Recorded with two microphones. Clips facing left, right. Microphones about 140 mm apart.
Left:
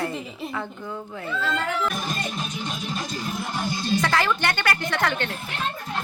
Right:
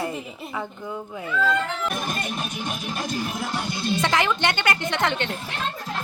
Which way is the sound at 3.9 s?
20° right (ahead or behind).